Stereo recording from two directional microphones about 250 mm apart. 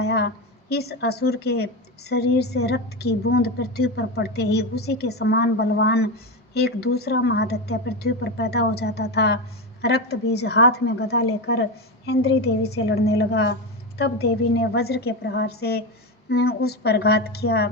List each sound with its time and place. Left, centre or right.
0.0 s a woman's voice: left